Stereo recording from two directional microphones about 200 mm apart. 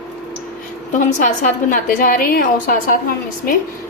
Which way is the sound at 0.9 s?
40° left (ahead or behind).